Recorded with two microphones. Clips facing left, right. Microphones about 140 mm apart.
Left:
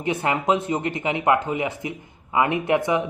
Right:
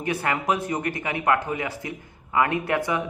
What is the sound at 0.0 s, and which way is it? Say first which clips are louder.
Speech: left 3 dB; 20° left (ahead or behind).